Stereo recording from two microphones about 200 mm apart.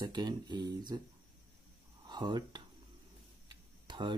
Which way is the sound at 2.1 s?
20° right (ahead or behind).